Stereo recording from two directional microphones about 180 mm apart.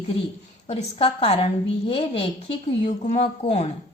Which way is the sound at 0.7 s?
35° left (ahead or behind).